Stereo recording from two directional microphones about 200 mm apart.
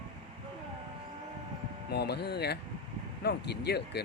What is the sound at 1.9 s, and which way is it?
Speech, 55° left (ahead or behind).